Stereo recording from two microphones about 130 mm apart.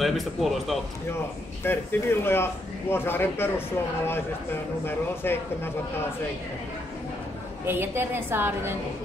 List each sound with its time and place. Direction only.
0.0 s speech: centre (ahead or behind)
1.6 s speech: 15° left (ahead or behind)
7.6 s a woman's voice: 15° right (ahead or behind)